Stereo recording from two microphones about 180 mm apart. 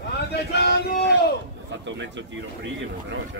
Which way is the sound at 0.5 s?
65° left (ahead or behind).